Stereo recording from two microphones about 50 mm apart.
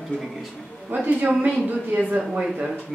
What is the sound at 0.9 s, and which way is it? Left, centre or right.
Speech, right.